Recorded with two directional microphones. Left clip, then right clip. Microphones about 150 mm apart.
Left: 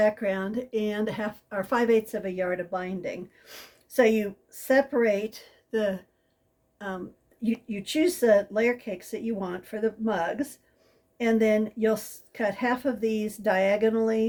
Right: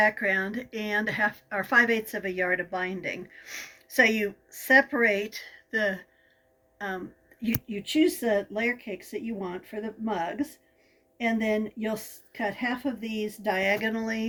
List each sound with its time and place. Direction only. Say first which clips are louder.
0.0 s speech: right 1 dB; 30° left (ahead or behind)
7.4 s speech: left 1 dB; 30° left (ahead or behind)